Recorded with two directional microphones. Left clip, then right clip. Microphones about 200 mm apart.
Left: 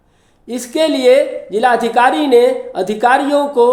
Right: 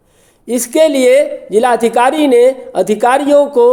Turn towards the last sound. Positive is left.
turn(degrees=-40)  # may be behind; listen again after turning